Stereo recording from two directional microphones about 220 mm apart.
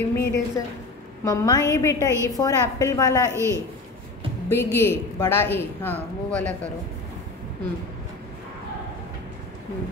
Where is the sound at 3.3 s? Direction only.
15° right (ahead or behind).